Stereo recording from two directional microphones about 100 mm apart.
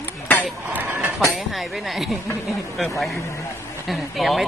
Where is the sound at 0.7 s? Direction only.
20° right (ahead or behind).